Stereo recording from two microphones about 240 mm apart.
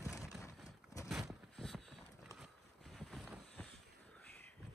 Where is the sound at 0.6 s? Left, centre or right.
Centre.